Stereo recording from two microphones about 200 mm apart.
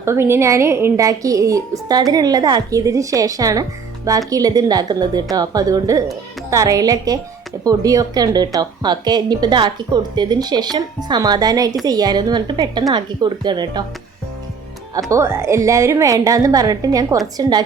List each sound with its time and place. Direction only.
0.0 s speech: 10° right (ahead or behind)
15.1 s speech: 15° right (ahead or behind)